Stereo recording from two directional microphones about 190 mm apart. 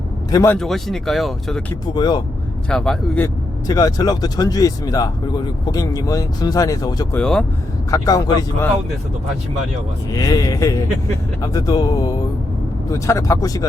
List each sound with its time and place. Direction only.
0.3 s a man's voice: 20° left (ahead or behind)
0.5 s speech: centre (ahead or behind)
1.9 s speech: 20° left (ahead or behind)
2.6 s speech: 5° left (ahead or behind)
3.7 s speech: 20° left (ahead or behind)
7.2 s speech: 5° left (ahead or behind)
7.9 s speech: 20° left (ahead or behind)
10.1 s speech: 20° left (ahead or behind)